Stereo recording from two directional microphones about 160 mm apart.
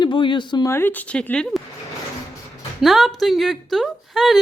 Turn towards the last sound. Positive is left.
turn(degrees=0)  # may be behind; listen again after turning